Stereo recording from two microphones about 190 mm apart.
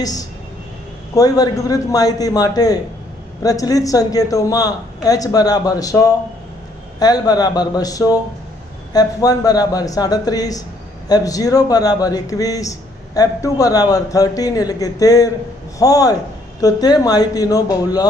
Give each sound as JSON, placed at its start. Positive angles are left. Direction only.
{"t": 0.0, "sound": "a man's voice", "side_deg": 20}